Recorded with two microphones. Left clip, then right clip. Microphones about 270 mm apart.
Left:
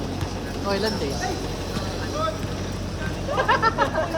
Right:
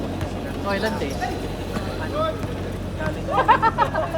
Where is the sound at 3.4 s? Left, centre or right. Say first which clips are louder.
Right 4 dB; right.